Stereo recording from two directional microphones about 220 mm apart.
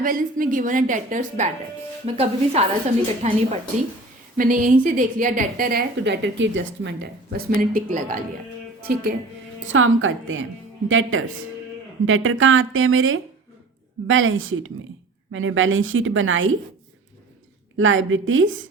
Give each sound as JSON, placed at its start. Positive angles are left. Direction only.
{"t": 0.0, "sound": "a woman's voice", "side_deg": -40}
{"t": 9.7, "sound": "speech", "side_deg": -65}
{"t": 17.7, "sound": "speech", "side_deg": -60}